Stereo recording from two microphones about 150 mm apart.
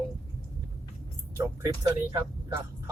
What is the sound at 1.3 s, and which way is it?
Speech, 25° right (ahead or behind).